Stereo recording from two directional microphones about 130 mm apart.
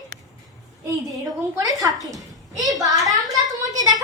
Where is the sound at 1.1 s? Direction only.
30° right (ahead or behind).